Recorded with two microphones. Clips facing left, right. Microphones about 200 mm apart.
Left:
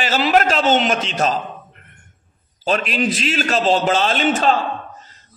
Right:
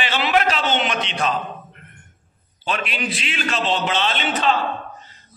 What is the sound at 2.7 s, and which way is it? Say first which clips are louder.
A man's voice: left 6 dB; 40° left (ahead or behind).